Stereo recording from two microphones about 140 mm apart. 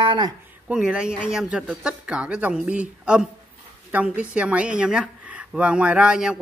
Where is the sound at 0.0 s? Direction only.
35° right (ahead or behind).